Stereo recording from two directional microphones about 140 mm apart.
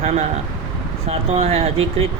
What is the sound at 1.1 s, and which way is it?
Speech, 50° right (ahead or behind).